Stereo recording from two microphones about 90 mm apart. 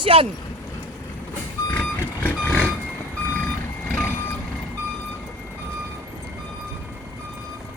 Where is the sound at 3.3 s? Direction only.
20° left (ahead or behind).